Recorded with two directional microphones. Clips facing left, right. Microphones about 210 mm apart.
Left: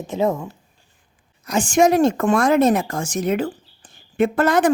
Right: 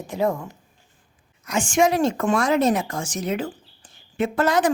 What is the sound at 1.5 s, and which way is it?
Speech, 40° left (ahead or behind).